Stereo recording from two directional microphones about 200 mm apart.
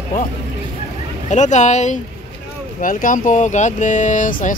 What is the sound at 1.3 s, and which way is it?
Speech, 35° left (ahead or behind).